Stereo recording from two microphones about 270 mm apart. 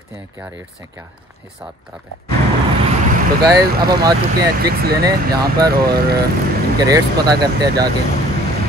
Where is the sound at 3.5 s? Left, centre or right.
Right.